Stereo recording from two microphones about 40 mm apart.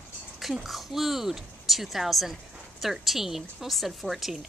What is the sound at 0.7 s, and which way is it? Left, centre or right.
A woman's voice, centre.